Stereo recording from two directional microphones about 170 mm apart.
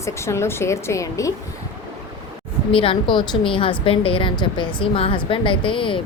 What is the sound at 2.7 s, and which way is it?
A woman's voice, 30° left (ahead or behind).